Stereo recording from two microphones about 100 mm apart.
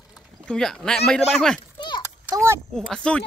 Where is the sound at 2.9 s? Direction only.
10° left (ahead or behind).